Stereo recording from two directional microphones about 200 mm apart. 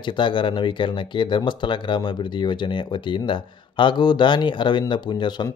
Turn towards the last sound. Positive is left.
turn(degrees=20)  # may be behind; listen again after turning